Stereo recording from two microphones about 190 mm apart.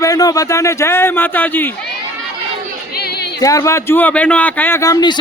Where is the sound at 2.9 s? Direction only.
55° left (ahead or behind).